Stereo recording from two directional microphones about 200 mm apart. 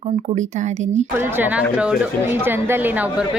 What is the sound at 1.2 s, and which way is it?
Speech, 10° right (ahead or behind).